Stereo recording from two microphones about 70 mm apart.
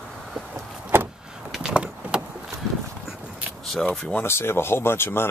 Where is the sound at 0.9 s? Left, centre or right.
Right.